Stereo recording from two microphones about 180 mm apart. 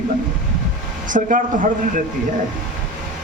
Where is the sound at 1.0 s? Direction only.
45° right (ahead or behind).